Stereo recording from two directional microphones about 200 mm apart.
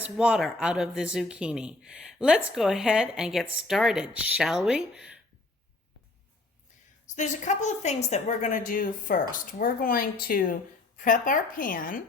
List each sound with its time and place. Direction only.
0.0 s speech: 5° right (ahead or behind)
7.2 s a woman's voice: 35° left (ahead or behind)